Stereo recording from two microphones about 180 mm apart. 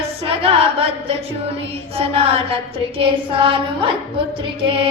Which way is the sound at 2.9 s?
30° right (ahead or behind).